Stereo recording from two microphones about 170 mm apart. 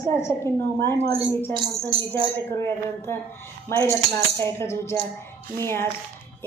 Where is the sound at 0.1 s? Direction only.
15° left (ahead or behind).